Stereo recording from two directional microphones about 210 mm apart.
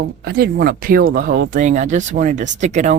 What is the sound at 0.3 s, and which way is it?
Speech, 45° right (ahead or behind).